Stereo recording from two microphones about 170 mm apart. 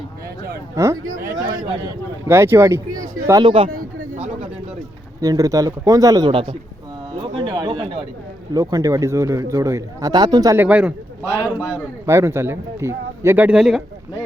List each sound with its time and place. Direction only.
0.8 s speech: 15° right (ahead or behind)
2.2 s speech: 15° right (ahead or behind); by 3.7 s 30° right (ahead or behind)
4.1 s a sound: 40° right (ahead or behind)
5.2 s a man's voice: 20° right (ahead or behind)
7.1 s a sound: 25° right (ahead or behind)
8.5 s a man's voice: 20° right (ahead or behind)
11.3 s a man's voice: 20° left (ahead or behind)
12.0 s speech: 15° right (ahead or behind)